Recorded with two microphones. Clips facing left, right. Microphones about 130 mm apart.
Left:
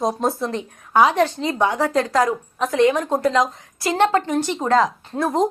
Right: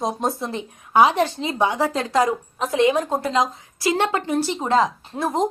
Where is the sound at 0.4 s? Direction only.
20° right (ahead or behind).